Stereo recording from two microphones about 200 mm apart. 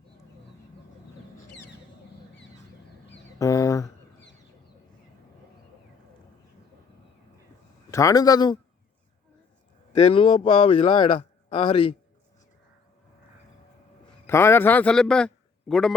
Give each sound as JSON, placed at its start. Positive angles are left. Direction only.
{"t": 3.3, "sound": "a sound", "side_deg": 15}
{"t": 7.9, "sound": "a man's voice", "side_deg": 15}
{"t": 9.9, "sound": "a man's voice", "side_deg": 30}
{"t": 14.3, "sound": "a man's voice", "side_deg": 10}